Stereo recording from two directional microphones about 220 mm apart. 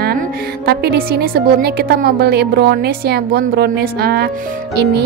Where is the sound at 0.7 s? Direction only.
45° right (ahead or behind).